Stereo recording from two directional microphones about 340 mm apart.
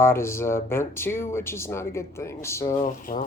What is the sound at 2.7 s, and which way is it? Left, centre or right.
Speech, left.